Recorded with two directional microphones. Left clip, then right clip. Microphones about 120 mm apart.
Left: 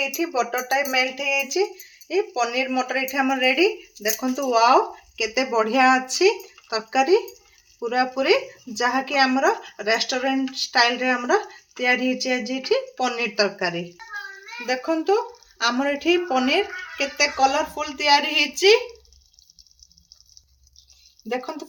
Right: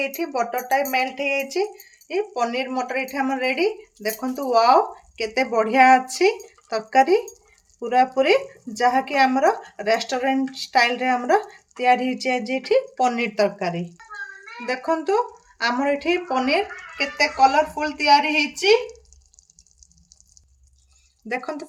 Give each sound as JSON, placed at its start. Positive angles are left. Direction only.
{"t": 0.0, "sound": "speech", "side_deg": -40}
{"t": 2.0, "sound": "speech", "side_deg": -30}
{"t": 13.6, "sound": "speech", "side_deg": -30}
{"t": 14.7, "sound": "a woman's voice", "side_deg": -40}
{"t": 21.2, "sound": "speech", "side_deg": -40}